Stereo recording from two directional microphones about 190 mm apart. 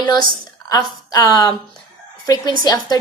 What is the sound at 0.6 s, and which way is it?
Speech, 20° left (ahead or behind).